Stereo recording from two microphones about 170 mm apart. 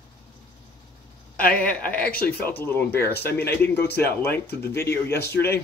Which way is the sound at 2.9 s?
70° left (ahead or behind).